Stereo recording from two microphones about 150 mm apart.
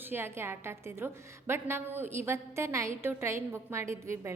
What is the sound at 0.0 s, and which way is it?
A woman's voice, 15° right (ahead or behind).